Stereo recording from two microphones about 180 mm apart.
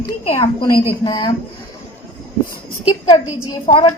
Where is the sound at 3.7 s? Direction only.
30° left (ahead or behind).